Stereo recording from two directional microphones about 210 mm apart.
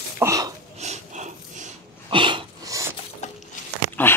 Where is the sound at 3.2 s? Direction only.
30° left (ahead or behind).